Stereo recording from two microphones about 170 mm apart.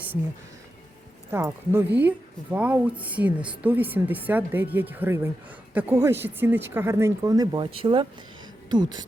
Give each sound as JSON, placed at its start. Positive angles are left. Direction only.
{"t": 1.3, "sound": "speech", "side_deg": -15}